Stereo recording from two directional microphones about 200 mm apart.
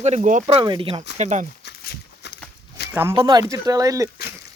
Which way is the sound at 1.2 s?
35° right (ahead or behind).